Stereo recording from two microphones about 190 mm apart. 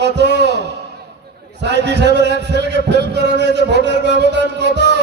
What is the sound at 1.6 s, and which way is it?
A man's voice, 65° right (ahead or behind).